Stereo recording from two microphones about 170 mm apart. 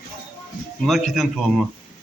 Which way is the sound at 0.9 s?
Centre (ahead or behind).